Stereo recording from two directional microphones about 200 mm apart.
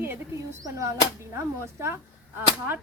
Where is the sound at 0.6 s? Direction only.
15° right (ahead or behind).